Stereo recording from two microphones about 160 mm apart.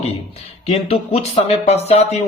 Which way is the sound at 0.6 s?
40° left (ahead or behind).